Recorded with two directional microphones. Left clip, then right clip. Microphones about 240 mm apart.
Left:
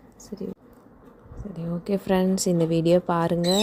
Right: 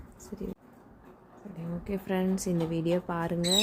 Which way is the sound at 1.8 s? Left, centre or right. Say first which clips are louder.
Left 8 dB; left.